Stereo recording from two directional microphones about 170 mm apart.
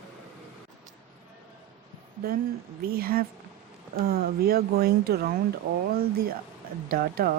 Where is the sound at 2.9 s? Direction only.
60° right (ahead or behind).